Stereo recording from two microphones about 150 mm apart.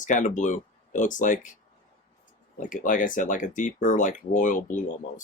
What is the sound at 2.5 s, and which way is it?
Speech, 60° left (ahead or behind).